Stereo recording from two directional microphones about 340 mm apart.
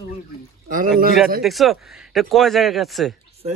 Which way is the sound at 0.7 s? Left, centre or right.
Right.